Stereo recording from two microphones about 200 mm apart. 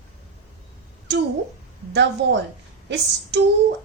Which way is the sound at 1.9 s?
60° right (ahead or behind).